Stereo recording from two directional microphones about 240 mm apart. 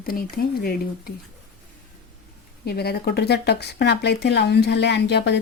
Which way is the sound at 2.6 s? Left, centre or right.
Left.